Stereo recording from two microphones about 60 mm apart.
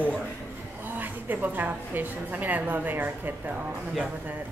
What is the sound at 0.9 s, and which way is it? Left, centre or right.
A woman's voice, right.